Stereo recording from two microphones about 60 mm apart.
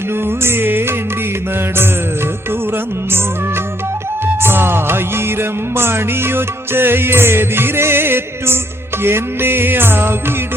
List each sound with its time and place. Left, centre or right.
0.3 s music: right
4.4 s music: right